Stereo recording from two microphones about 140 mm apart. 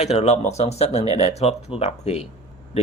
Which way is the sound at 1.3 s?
50° left (ahead or behind).